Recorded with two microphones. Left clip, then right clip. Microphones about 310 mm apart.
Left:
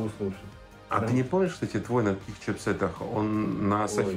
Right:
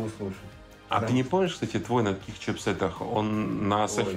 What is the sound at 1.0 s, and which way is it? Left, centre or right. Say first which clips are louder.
Speech: even; right.